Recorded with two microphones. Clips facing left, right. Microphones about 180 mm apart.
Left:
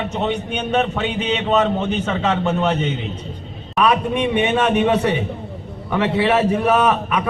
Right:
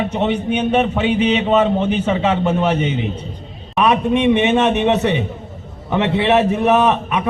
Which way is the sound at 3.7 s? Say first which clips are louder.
Right 2 dB; 25° right (ahead or behind).